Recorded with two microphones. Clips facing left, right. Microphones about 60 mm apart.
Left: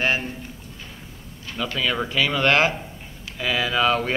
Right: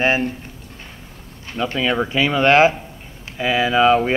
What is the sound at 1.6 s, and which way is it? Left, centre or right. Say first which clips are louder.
Speech: right 5 dB; right.